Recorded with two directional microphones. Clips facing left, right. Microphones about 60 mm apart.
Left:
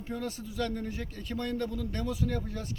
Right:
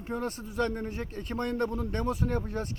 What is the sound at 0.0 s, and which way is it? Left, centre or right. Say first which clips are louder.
A man's voice: right 2 dB; right.